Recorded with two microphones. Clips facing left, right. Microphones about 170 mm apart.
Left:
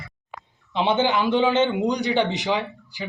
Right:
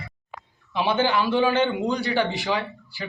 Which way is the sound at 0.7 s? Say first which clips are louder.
Left 1 dB; 20° left (ahead or behind).